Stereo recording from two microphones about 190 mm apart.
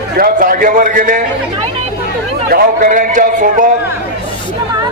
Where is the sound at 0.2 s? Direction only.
45° right (ahead or behind).